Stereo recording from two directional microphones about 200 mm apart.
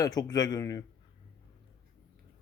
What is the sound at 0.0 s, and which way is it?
Speech, 20° left (ahead or behind).